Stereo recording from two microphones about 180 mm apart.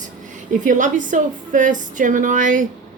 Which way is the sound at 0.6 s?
45° right (ahead or behind).